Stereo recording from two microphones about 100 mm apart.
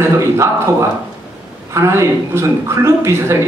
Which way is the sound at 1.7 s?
25° right (ahead or behind).